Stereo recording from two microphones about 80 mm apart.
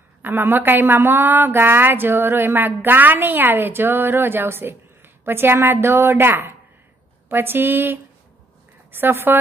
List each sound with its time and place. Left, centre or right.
0.2 s a woman's voice: right